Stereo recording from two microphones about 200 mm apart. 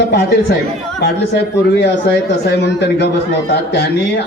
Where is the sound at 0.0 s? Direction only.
60° left (ahead or behind).